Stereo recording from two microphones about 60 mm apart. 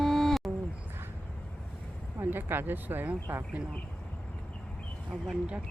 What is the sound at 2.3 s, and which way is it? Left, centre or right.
Speech, right.